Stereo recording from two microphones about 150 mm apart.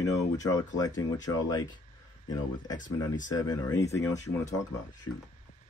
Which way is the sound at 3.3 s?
25° left (ahead or behind).